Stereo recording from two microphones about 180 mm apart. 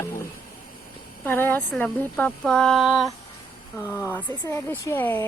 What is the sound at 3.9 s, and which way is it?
Speech, 10° left (ahead or behind).